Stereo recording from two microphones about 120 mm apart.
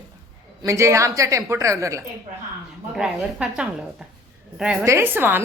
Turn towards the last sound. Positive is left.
turn(degrees=-15)  # may be behind; listen again after turning